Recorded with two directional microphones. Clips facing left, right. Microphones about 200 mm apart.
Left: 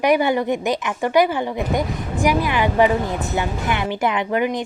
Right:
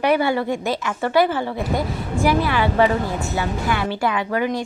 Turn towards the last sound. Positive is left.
turn(degrees=20)  # may be behind; listen again after turning